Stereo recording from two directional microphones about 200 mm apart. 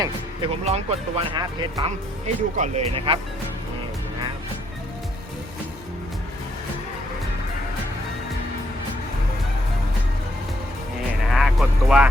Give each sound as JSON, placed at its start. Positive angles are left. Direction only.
{"t": 0.0, "sound": "speech", "side_deg": -30}
{"t": 2.2, "sound": "speech", "side_deg": -35}
{"t": 11.3, "sound": "speech", "side_deg": 0}